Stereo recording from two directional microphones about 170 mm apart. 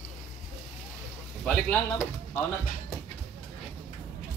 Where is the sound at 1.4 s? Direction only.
10° left (ahead or behind).